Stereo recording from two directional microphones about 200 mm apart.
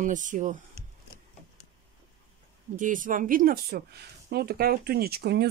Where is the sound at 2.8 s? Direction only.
40° right (ahead or behind).